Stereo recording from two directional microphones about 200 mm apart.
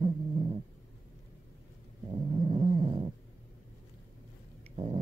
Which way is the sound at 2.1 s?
25° right (ahead or behind).